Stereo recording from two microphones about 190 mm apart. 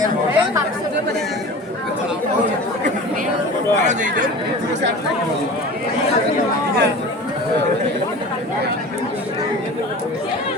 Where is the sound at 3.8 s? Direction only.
40° right (ahead or behind).